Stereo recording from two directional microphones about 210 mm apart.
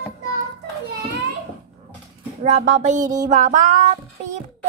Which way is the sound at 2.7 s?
35° right (ahead or behind).